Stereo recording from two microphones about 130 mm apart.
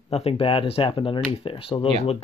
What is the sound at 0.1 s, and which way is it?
Speech, 45° left (ahead or behind).